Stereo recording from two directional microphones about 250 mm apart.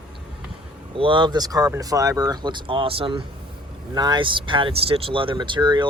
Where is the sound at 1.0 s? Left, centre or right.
Centre.